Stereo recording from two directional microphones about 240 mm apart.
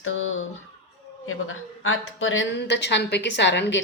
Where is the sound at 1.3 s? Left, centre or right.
Left.